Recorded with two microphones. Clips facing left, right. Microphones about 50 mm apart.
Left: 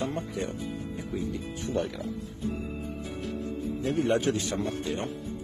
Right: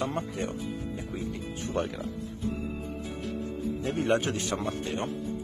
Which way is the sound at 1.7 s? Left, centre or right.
Right.